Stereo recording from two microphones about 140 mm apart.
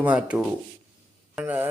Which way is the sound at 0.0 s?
10° right (ahead or behind).